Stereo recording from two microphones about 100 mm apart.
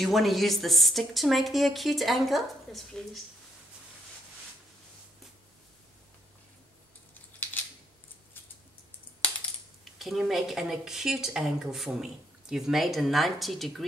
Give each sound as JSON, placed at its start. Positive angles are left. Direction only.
{"t": 0.0, "sound": "speech", "side_deg": 0}
{"t": 9.9, "sound": "speech", "side_deg": 0}